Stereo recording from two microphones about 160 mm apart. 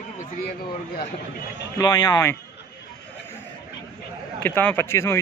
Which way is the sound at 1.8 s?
25° left (ahead or behind).